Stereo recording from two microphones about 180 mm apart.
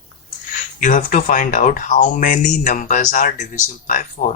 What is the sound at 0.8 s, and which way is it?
Speech, 45° left (ahead or behind).